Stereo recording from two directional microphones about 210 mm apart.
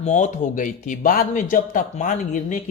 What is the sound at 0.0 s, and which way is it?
Speech, 35° left (ahead or behind).